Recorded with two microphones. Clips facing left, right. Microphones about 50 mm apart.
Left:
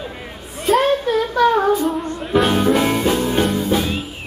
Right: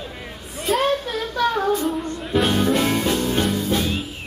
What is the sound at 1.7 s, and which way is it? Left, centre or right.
Female singing, centre.